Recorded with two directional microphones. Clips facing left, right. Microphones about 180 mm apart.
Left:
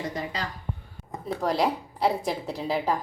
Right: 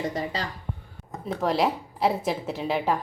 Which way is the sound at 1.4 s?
Centre (ahead or behind).